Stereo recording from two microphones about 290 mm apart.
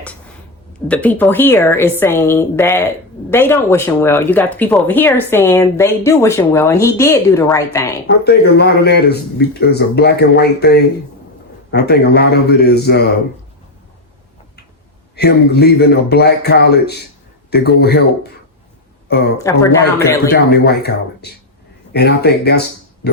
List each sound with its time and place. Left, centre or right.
0.9 s speech: centre
8.0 s speech: left
15.1 s speech: left
20.3 s speech: left